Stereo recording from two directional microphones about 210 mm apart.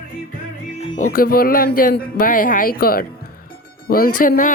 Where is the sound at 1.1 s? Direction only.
45° left (ahead or behind).